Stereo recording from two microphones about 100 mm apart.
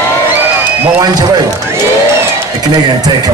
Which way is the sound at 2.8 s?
45° right (ahead or behind).